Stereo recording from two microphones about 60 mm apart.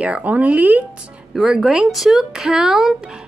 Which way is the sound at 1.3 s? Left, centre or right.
Centre.